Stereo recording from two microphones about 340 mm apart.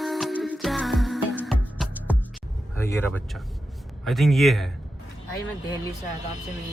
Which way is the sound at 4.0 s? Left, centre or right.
Centre.